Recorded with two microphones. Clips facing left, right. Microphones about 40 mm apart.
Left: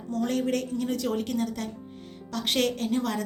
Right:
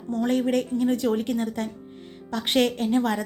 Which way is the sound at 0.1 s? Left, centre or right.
Right.